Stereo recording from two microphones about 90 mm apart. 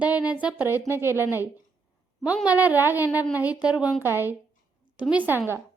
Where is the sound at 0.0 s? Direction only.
15° right (ahead or behind).